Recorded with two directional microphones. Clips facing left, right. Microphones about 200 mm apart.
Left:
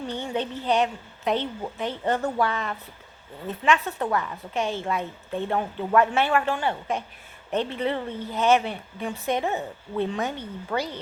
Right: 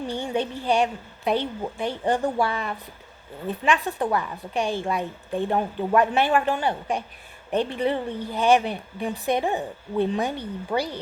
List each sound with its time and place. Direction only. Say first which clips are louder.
0.1 s a woman's voice: right 2 dB; 10° right (ahead or behind)